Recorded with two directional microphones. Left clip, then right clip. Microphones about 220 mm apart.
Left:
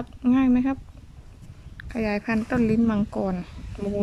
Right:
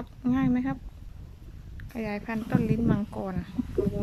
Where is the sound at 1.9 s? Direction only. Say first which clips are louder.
Left 7 dB; 5° left (ahead or behind).